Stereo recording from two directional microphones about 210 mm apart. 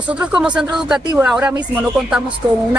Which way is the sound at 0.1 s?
5° right (ahead or behind).